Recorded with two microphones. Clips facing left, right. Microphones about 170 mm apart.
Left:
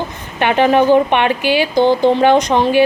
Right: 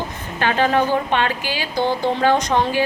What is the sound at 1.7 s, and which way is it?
Speech, 70° left (ahead or behind).